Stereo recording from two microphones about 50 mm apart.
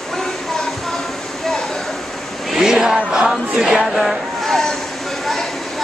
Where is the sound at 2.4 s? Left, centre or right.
Centre.